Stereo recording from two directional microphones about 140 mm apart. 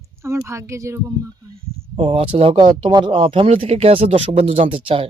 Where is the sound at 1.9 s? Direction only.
40° right (ahead or behind).